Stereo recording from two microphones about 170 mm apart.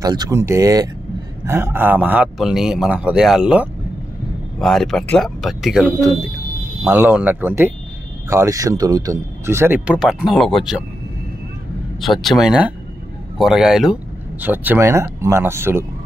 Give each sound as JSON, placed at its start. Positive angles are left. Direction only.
{"t": 0.0, "sound": "speech", "side_deg": -25}
{"t": 12.0, "sound": "speech", "side_deg": 0}